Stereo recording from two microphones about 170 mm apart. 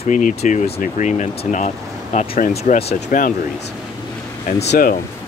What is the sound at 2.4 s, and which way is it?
Speech, 55° left (ahead or behind).